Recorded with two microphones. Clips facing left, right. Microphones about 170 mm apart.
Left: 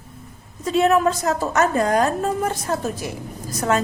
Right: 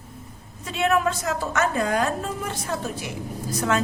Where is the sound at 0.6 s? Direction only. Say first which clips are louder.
Left 5 dB; 40° left (ahead or behind).